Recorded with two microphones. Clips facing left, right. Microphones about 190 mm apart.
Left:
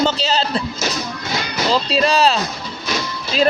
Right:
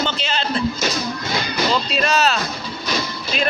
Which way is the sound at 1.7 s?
30° left (ahead or behind).